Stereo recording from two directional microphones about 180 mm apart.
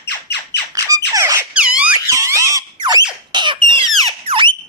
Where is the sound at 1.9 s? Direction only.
15° right (ahead or behind).